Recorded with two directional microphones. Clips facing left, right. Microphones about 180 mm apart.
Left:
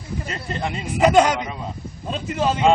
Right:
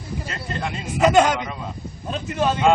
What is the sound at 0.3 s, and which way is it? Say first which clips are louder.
Speech: left 2 dB; 20° left (ahead or behind).